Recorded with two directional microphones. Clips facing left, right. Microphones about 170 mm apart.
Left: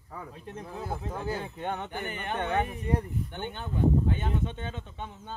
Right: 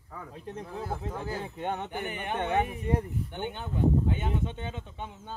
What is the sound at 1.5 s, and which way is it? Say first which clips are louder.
Speech: right 1 dB; 25° right (ahead or behind).